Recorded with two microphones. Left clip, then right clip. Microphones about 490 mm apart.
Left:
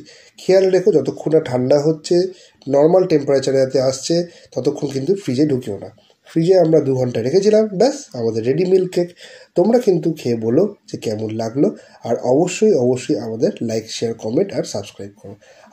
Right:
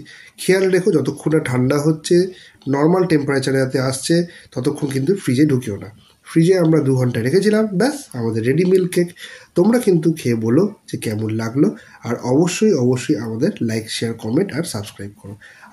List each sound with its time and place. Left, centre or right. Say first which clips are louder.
0.5 s speech: left 2 dB; right